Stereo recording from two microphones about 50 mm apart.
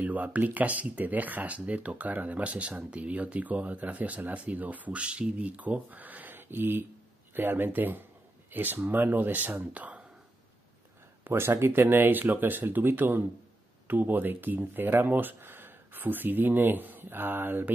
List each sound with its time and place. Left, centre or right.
0.0 s speech: right
11.2 s speech: right